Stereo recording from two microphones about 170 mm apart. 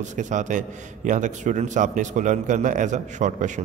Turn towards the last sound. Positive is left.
turn(degrees=-45)  # may be behind; listen again after turning